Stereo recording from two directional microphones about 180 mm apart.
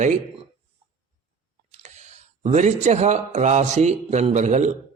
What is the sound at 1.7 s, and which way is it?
Speech, 40° right (ahead or behind).